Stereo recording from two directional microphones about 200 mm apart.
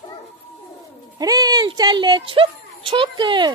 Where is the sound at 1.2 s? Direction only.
20° right (ahead or behind).